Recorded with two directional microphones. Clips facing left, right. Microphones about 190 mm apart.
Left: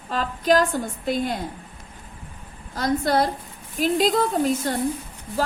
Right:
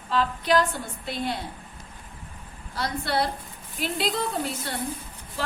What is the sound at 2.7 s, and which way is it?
A woman's voice, 45° left (ahead or behind).